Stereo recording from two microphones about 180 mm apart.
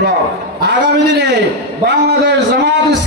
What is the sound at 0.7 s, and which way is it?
A man's voice, 75° right (ahead or behind).